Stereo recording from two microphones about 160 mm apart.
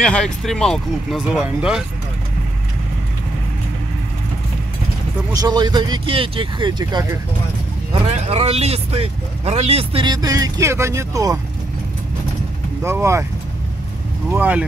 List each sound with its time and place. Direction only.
0.0 s speech: 5° left (ahead or behind)
5.3 s speech: 25° right (ahead or behind)
8.1 s speech: 40° right (ahead or behind)
10.1 s speech: 25° right (ahead or behind)
12.8 s speech: 15° right (ahead or behind)
14.3 s speech: 10° right (ahead or behind)